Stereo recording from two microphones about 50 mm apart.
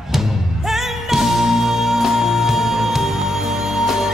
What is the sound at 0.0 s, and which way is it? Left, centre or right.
Music, centre.